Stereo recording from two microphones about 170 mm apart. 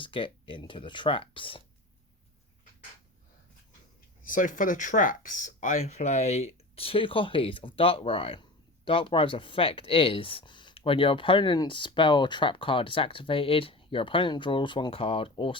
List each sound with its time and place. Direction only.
0.0 s speech: 30° left (ahead or behind)
4.2 s speech: 50° left (ahead or behind); by 15.5 s 30° left (ahead or behind)